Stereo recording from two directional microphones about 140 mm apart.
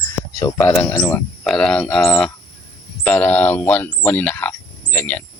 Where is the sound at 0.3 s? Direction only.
25° left (ahead or behind); by 2.3 s 5° left (ahead or behind).